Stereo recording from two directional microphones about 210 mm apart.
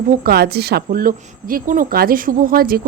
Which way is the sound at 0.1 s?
45° right (ahead or behind).